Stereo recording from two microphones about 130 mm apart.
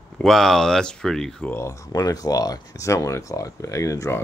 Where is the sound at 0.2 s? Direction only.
Centre (ahead or behind).